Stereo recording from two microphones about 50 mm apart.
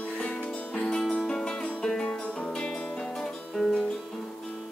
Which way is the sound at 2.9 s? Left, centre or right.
Centre.